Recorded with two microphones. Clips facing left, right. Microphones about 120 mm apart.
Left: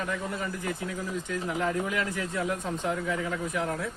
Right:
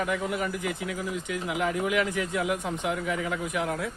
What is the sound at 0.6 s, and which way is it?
Speech, 90° right.